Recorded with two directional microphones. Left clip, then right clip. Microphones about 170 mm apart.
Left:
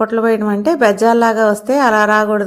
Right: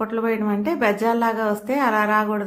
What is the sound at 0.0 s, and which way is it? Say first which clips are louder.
A woman's voice: left 9 dB; 30° left (ahead or behind).